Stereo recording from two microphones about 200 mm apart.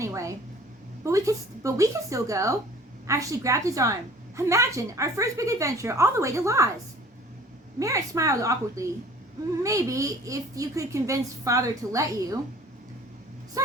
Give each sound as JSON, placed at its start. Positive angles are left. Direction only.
{"t": 0.0, "sound": "a woman's voice", "side_deg": -15}
{"t": 7.8, "sound": "a woman's voice", "side_deg": -15}